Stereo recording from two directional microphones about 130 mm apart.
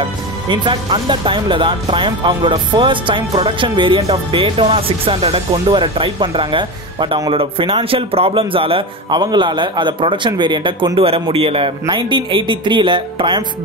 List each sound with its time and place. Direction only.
0.5 s speech: 40° right (ahead or behind)